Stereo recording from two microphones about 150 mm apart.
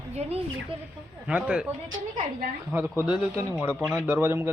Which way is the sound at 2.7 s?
10° right (ahead or behind).